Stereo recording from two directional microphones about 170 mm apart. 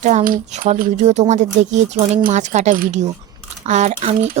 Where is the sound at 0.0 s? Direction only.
45° right (ahead or behind).